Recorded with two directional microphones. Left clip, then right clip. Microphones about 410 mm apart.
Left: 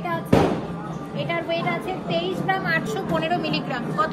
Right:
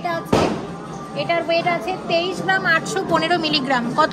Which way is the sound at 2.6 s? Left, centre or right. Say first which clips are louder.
Right 5 dB; right.